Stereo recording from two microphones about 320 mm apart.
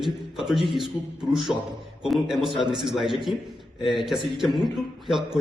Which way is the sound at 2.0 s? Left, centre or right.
Centre.